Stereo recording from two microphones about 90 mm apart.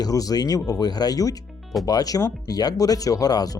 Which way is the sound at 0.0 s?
40° left (ahead or behind).